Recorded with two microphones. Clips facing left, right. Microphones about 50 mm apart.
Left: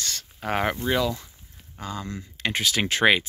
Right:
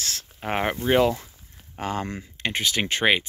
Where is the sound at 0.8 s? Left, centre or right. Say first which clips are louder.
Right 5 dB; right.